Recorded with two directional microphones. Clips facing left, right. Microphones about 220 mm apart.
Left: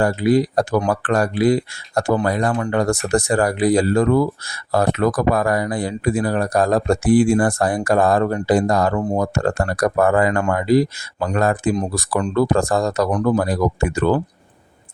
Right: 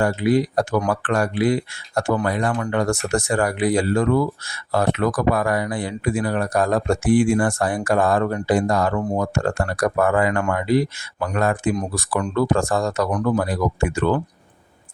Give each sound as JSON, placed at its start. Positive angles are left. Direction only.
{"t": 0.0, "sound": "speech", "side_deg": 35}